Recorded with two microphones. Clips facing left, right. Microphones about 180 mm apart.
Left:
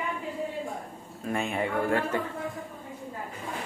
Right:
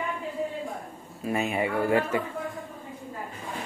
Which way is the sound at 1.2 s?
5° right (ahead or behind).